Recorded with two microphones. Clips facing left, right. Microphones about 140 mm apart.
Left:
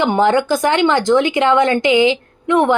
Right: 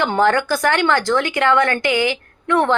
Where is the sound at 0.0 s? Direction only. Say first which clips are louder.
Left 3 dB; 20° left (ahead or behind).